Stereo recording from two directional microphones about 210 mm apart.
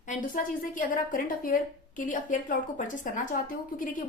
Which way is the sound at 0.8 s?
40° left (ahead or behind).